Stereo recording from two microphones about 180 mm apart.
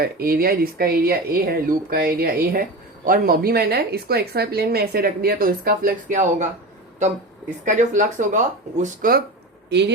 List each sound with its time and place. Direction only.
0.0 s speech: 60° right (ahead or behind)
7.6 s speech: 45° right (ahead or behind)
9.6 s speech: 70° right (ahead or behind)